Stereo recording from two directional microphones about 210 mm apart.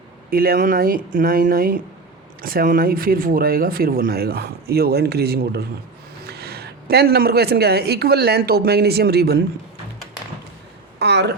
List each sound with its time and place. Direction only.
0.3 s speech: 45° right (ahead or behind)
11.0 s speech: 55° right (ahead or behind)